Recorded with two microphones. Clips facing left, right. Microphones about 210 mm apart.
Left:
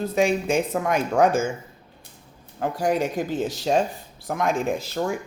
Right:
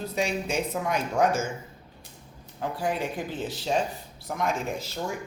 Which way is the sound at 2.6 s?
45° left (ahead or behind).